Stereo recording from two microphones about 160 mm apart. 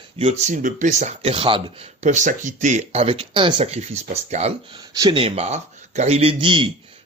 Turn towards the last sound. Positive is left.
turn(degrees=-30)  # may be behind; listen again after turning